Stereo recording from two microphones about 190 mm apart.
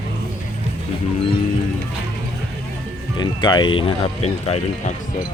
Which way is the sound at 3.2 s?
25° left (ahead or behind).